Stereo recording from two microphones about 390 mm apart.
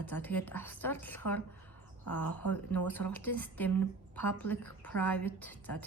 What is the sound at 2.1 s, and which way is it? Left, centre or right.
Speech, left.